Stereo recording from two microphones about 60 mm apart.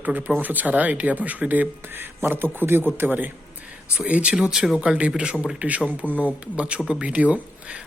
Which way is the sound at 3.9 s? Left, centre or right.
Right.